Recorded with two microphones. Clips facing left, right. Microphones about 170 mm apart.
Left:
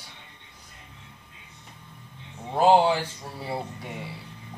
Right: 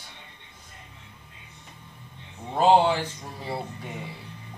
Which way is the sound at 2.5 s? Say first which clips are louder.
Even; 10° left (ahead or behind).